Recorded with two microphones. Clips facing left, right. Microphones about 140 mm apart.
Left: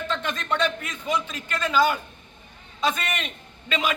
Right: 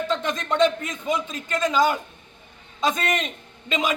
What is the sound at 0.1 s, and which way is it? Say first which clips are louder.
A man's voice: right 3 dB; 15° right (ahead or behind).